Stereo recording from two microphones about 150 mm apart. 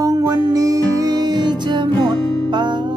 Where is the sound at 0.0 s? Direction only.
25° right (ahead or behind).